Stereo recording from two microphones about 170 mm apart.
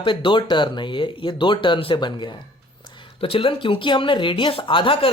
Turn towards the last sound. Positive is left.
turn(degrees=30)  # may be behind; listen again after turning